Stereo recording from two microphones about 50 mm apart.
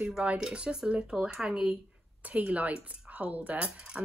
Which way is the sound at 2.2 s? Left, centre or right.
Right.